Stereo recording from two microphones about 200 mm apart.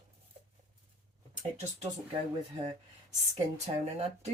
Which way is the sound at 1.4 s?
35° right (ahead or behind).